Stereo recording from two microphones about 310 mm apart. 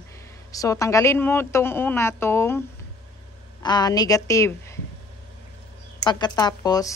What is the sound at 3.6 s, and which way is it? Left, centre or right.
A woman's voice, centre.